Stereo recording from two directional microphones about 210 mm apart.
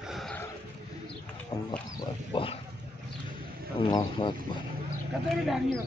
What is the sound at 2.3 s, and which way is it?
Speech, 25° left (ahead or behind).